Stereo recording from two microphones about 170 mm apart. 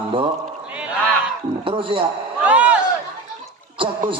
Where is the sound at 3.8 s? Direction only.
30° right (ahead or behind).